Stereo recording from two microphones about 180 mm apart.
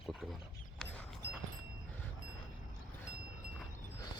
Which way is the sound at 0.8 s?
5° left (ahead or behind).